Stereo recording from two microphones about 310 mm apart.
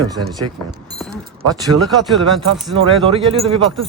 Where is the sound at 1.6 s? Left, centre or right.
Centre.